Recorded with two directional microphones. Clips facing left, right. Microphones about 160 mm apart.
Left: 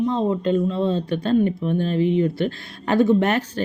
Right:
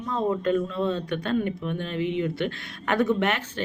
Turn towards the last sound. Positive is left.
turn(degrees=40)  # may be behind; listen again after turning